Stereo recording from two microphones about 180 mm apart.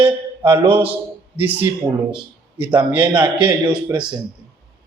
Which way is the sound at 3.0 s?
25° right (ahead or behind).